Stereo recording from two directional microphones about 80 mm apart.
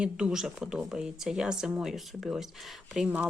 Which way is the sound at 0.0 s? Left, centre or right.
Centre.